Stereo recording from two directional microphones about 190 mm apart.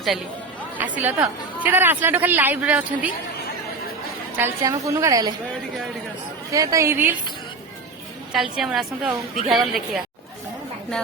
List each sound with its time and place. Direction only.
0.8 s a woman's voice: 10° right (ahead or behind)
4.4 s a woman's voice: 15° right (ahead or behind)
6.5 s a woman's voice: 15° right (ahead or behind)
8.3 s a woman's voice: centre (ahead or behind)